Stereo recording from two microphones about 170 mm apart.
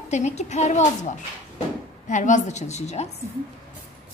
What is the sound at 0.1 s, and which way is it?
A woman's voice, 40° left (ahead or behind).